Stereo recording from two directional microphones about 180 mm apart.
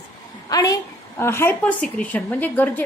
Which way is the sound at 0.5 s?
20° left (ahead or behind).